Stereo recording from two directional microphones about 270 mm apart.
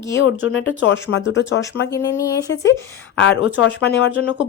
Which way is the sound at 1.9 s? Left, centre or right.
Centre.